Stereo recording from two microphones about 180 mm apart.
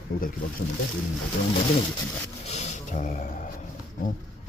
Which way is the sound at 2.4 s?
40° left (ahead or behind).